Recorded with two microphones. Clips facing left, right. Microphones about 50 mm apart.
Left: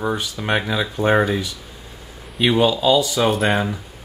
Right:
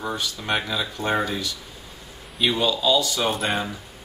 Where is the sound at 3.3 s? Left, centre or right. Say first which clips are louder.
Left 6 dB; centre.